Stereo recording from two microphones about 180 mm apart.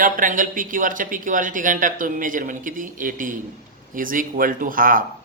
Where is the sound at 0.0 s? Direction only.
50° right (ahead or behind).